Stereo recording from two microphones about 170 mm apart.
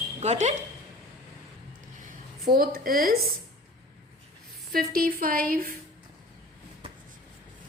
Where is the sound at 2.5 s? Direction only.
65° right (ahead or behind).